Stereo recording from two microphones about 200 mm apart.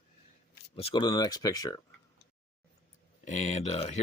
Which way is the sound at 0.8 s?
25° left (ahead or behind).